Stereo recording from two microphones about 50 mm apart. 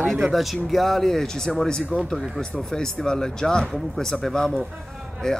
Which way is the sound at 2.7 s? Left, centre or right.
Centre.